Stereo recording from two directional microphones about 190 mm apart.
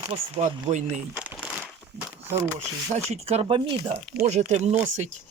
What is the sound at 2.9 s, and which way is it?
Speech, 35° right (ahead or behind).